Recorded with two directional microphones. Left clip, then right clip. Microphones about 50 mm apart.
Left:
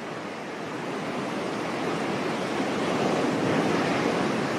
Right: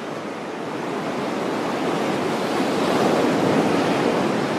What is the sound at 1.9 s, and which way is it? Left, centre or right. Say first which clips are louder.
Waves: right 6 dB; right.